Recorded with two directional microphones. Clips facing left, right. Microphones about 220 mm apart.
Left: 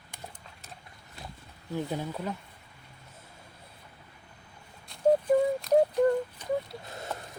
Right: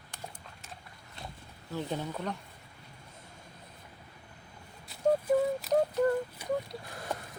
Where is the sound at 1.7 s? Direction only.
10° left (ahead or behind).